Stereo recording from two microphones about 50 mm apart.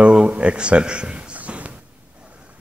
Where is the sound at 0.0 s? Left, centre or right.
Right.